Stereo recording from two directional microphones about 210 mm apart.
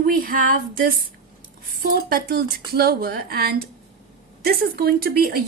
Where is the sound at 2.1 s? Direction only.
45° right (ahead or behind).